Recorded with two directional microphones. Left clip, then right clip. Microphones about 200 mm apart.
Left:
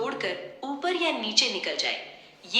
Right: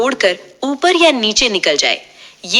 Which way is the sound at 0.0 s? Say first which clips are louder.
Right 15 dB; 50° right (ahead or behind).